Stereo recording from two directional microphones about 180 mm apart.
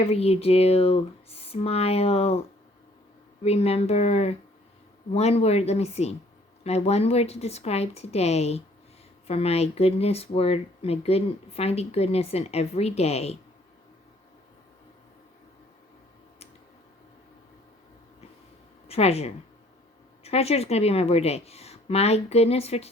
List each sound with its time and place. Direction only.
0.0 s speech: 35° left (ahead or behind)
3.4 s speech: 35° left (ahead or behind)
18.9 s speech: 35° left (ahead or behind)